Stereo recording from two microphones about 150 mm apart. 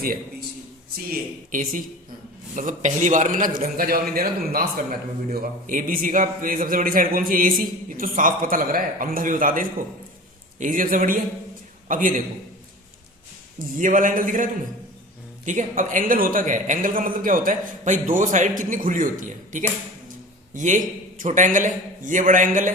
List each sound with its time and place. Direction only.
0.0 s a man's voice: 75° right (ahead or behind)
13.7 s a man's voice: 60° right (ahead or behind)